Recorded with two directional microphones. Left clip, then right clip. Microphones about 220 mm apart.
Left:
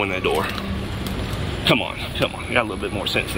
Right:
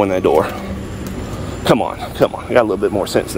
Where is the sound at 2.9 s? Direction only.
90° right.